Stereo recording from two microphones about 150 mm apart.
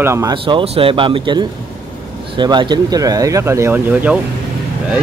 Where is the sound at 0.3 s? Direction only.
35° right (ahead or behind).